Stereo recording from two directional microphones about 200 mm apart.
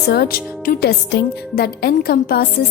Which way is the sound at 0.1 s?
50° left (ahead or behind).